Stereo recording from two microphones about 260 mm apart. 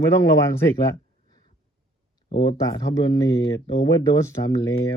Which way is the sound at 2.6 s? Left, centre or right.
Centre.